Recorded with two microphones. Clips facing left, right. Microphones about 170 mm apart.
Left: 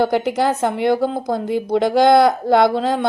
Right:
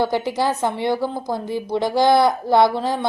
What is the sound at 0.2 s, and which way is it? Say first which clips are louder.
A woman's voice: left 3 dB; 50° left (ahead or behind).